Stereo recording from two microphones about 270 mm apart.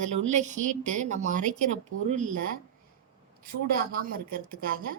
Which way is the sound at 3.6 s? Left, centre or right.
Right.